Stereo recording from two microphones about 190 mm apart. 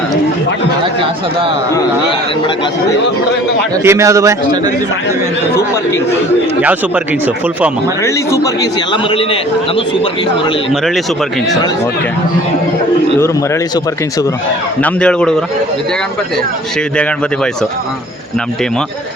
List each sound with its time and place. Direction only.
3.8 s speech: 15° right (ahead or behind)
5.5 s speech: 15° left (ahead or behind)
6.6 s speech: 10° right (ahead or behind)
8.0 s a man's voice: 15° left (ahead or behind)
13.1 s a man's voice: 15° left (ahead or behind)
17.0 s a man's voice: 5° left (ahead or behind)